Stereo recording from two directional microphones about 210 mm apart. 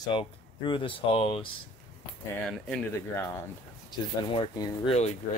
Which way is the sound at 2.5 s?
5° left (ahead or behind).